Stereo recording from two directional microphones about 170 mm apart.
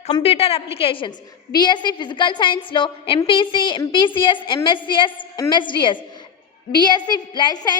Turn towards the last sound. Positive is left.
turn(degrees=25)  # may be behind; listen again after turning